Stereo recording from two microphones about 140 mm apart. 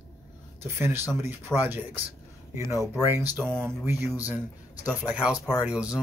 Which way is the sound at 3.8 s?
10° right (ahead or behind).